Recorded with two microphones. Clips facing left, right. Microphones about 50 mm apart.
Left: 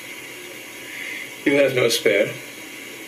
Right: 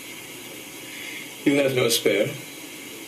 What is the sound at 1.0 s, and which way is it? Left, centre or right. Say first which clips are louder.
Speech: left 1 dB; left.